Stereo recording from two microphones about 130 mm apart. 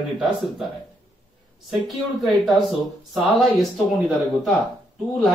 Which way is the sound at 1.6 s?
Centre (ahead or behind).